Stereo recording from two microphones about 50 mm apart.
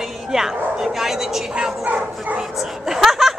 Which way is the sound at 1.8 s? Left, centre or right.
Right.